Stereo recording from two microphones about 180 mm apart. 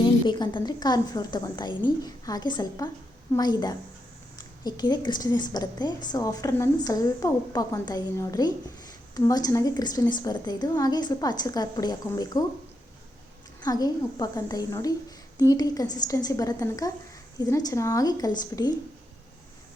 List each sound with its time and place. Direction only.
0.0 s a woman's voice: 25° left (ahead or behind)
13.6 s a woman's voice: 20° left (ahead or behind)